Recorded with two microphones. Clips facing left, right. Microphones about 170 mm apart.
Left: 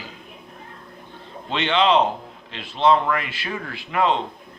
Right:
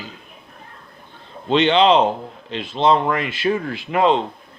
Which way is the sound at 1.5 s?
25° right (ahead or behind).